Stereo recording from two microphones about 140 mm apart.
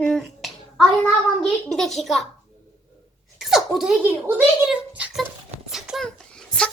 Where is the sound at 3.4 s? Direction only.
5° right (ahead or behind).